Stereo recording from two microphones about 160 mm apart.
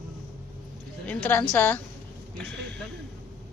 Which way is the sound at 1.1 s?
10° left (ahead or behind).